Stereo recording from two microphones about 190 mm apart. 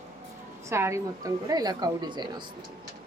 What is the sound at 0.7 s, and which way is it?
A woman's voice, 15° right (ahead or behind).